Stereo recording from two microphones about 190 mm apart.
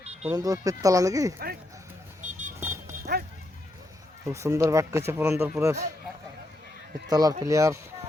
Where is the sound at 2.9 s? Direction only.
55° right (ahead or behind).